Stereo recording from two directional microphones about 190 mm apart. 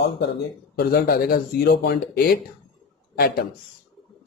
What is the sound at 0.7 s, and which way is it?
Speech, 55° left (ahead or behind).